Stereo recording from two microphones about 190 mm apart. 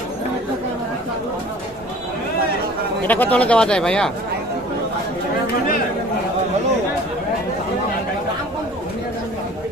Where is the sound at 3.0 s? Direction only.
10° left (ahead or behind).